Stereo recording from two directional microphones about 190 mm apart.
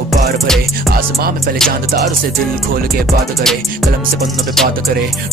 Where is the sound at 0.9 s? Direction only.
50° right (ahead or behind).